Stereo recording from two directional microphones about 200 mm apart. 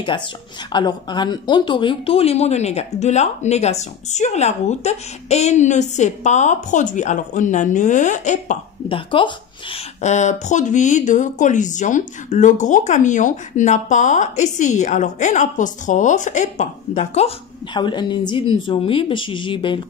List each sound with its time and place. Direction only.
0.7 s speech: 20° left (ahead or behind)
10.0 s speech: 35° left (ahead or behind)
17.7 s a woman's voice: 20° left (ahead or behind)